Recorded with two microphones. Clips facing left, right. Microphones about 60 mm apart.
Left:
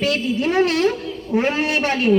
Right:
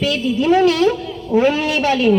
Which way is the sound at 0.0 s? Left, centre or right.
Left.